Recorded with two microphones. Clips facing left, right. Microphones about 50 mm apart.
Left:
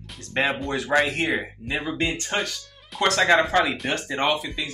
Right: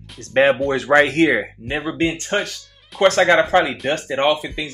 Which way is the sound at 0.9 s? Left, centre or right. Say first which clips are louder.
Right 8 dB; right.